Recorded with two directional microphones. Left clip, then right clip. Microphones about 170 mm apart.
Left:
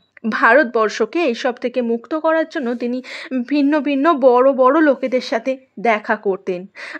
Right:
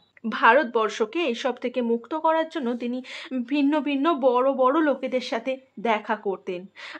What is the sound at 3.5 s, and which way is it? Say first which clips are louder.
A woman's voice: left 7 dB; 35° left (ahead or behind).